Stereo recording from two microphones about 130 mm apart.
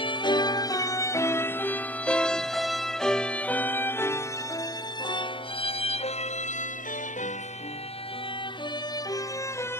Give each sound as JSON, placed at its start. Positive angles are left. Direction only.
{"t": 0.0, "sound": "music", "side_deg": 35}
{"t": 5.0, "sound": "music", "side_deg": 40}